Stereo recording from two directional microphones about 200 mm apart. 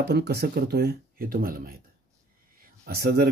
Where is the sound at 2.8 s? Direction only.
50° right (ahead or behind).